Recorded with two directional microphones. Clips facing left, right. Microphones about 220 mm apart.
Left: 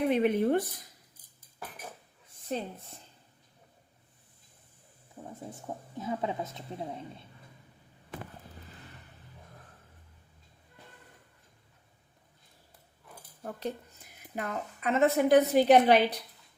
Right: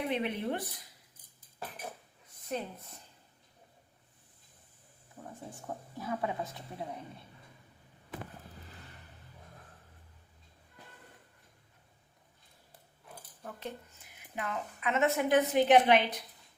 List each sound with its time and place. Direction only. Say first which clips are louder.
0.1 s speech: left 8 dB; 45° left (ahead or behind)
2.5 s speech: left 2 dB; 30° left (ahead or behind)
5.5 s speech: left 2 dB; 20° left (ahead or behind)
13.4 s a woman's voice: left 6 dB; 40° left (ahead or behind)